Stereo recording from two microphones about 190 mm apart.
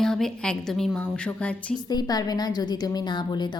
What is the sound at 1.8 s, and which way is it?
A woman's voice, 20° left (ahead or behind).